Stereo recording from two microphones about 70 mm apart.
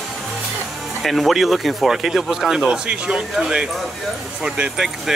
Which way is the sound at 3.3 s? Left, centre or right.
Centre.